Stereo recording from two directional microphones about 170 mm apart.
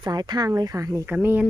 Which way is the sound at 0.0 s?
25° right (ahead or behind).